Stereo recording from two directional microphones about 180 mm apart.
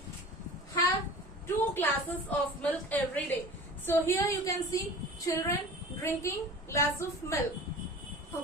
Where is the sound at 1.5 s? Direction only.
10° left (ahead or behind).